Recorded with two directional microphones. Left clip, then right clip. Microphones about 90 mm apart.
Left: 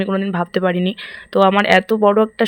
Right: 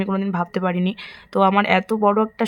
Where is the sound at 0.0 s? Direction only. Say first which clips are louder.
Left 4 dB; 20° left (ahead or behind).